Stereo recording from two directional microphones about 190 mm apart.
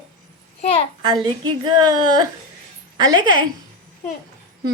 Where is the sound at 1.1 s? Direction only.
20° right (ahead or behind).